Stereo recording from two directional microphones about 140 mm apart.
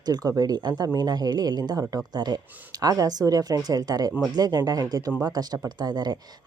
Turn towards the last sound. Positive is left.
turn(degrees=-30)  # may be behind; listen again after turning